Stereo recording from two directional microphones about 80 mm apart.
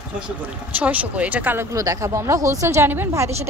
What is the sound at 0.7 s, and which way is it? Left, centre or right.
Speech, centre.